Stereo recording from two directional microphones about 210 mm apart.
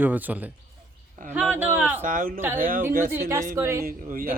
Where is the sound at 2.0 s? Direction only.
40° right (ahead or behind).